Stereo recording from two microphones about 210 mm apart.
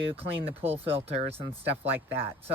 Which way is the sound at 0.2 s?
25° right (ahead or behind).